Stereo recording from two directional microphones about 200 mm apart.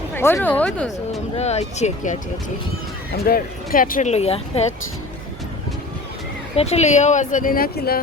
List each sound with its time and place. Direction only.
0.1 s speech: 10° left (ahead or behind)
1.4 s speech: 30° left (ahead or behind)
3.1 s speech: 50° left (ahead or behind); by 4.6 s 30° left (ahead or behind)
6.6 s speech: 30° left (ahead or behind); by 8.0 s 50° left (ahead or behind)